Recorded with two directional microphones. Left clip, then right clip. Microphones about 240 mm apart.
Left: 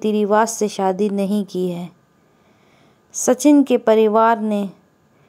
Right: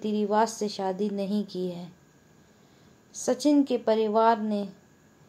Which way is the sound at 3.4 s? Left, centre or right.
Left.